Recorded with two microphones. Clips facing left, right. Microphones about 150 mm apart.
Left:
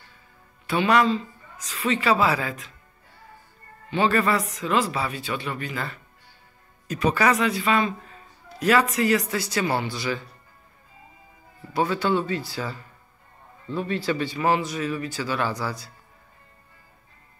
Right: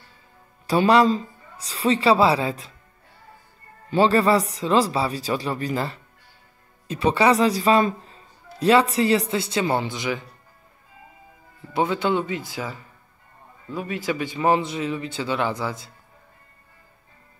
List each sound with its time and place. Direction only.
0.7 s a woman's voice: 35° right (ahead or behind)
3.9 s a woman's voice: 35° right (ahead or behind)
11.7 s a man's voice: 20° right (ahead or behind)